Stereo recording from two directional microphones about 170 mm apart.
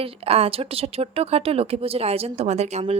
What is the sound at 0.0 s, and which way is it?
A woman's voice, 35° right (ahead or behind).